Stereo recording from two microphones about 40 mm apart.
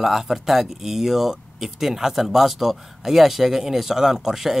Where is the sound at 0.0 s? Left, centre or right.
Centre.